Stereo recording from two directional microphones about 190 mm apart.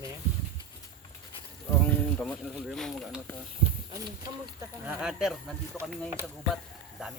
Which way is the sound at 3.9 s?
15° right (ahead or behind).